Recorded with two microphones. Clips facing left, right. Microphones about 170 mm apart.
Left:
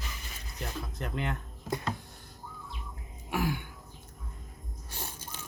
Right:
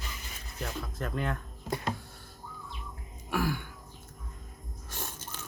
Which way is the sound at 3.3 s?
20° left (ahead or behind).